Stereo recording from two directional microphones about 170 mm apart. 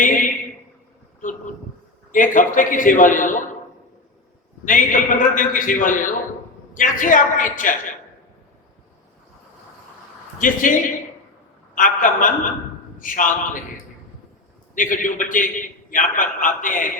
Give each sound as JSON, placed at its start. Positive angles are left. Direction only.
{"t": 0.0, "sound": "a sound", "side_deg": 50}
{"t": 1.2, "sound": "a man's voice", "side_deg": 50}
{"t": 4.6, "sound": "a man's voice", "side_deg": 50}
{"t": 10.4, "sound": "a man's voice", "side_deg": 50}
{"t": 14.8, "sound": "a man's voice", "side_deg": 50}